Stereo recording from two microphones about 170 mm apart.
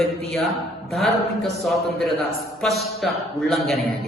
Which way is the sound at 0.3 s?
Centre (ahead or behind).